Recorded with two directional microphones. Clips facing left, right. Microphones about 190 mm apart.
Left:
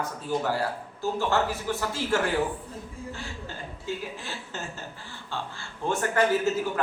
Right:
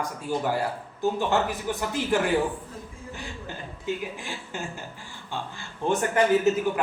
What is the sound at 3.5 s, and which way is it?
Speech, 15° right (ahead or behind).